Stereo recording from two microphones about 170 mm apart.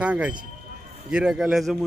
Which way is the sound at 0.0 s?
5° right (ahead or behind).